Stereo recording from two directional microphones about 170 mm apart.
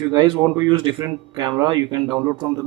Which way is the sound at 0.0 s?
25° right (ahead or behind).